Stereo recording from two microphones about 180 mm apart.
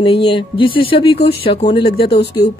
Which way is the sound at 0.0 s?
25° left (ahead or behind).